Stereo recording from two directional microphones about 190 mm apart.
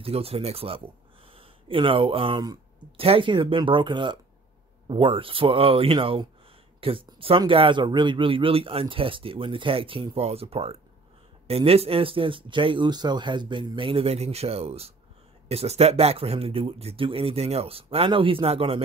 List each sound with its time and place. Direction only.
0.0 s speech: 30° right (ahead or behind)